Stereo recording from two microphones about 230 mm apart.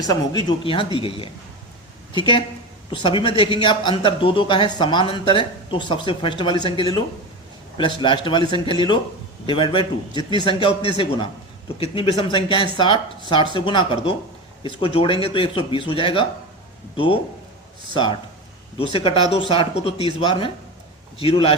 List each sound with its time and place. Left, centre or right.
0.0 s speech: centre
2.9 s speech: left
8.0 s speech: centre
17.9 s speech: centre